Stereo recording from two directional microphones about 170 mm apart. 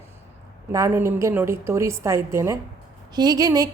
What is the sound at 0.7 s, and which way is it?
Speech, 15° right (ahead or behind).